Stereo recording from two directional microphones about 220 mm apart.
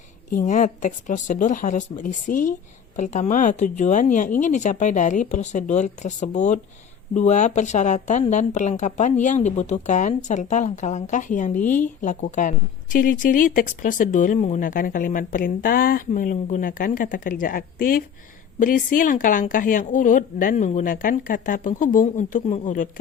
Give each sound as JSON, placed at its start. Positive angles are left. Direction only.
{"t": 0.3, "sound": "speech", "side_deg": 35}